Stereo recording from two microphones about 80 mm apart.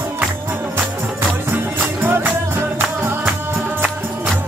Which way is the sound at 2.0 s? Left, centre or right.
Right.